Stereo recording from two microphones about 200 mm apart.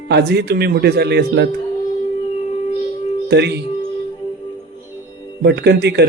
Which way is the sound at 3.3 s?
55° right (ahead or behind).